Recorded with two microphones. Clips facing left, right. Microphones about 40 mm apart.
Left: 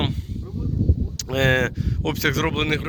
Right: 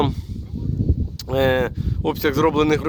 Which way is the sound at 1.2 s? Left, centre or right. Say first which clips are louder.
Right 2 dB; left.